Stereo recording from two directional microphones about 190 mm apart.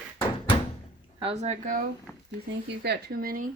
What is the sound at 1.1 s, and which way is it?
Speech, 30° right (ahead or behind).